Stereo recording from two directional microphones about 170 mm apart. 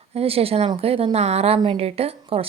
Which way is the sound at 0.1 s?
35° right (ahead or behind).